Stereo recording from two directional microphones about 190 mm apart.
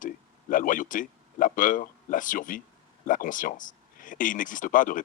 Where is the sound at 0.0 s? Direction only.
45° left (ahead or behind).